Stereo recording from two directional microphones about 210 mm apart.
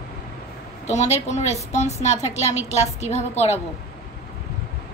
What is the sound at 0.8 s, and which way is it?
A woman's voice, 30° left (ahead or behind).